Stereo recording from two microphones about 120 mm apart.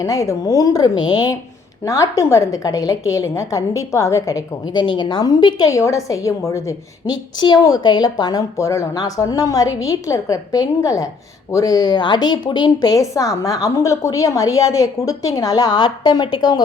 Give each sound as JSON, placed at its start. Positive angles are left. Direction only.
{"t": 0.0, "sound": "a woman's voice", "side_deg": 25}
{"t": 1.8, "sound": "a woman's voice", "side_deg": 25}
{"t": 7.3, "sound": "a woman's voice", "side_deg": 35}